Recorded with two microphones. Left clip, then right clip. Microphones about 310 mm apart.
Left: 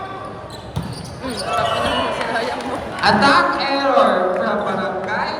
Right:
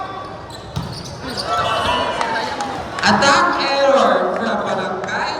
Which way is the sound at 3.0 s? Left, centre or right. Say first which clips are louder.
Even; centre.